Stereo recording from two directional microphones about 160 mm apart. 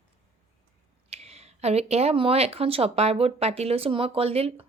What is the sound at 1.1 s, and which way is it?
Speech, 40° right (ahead or behind).